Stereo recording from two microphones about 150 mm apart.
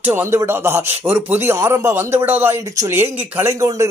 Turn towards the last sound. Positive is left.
turn(degrees=-20)  # may be behind; listen again after turning